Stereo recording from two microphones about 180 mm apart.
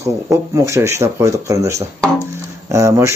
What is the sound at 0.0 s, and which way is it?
Speech, 15° right (ahead or behind).